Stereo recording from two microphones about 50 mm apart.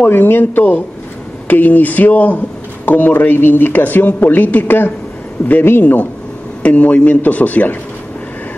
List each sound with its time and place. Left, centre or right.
0.0 s speech: left
6.6 s speech: left